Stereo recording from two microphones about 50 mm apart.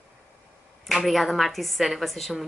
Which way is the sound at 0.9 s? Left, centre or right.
Centre.